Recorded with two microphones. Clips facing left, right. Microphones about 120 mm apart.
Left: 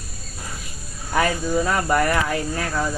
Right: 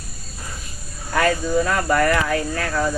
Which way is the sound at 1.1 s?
15° left (ahead or behind).